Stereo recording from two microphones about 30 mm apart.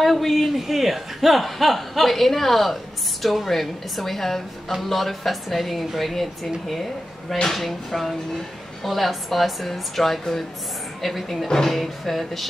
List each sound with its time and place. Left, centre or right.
0.0 s speech: centre
11.4 s speech: centre
11.7 s speech: centre